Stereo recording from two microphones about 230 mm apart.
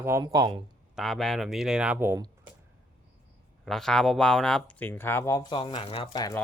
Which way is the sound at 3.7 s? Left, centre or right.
Centre.